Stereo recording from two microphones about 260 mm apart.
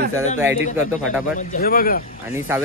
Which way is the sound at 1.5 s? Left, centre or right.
Left.